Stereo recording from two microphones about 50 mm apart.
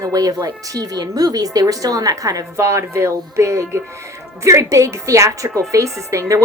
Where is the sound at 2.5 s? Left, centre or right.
Right.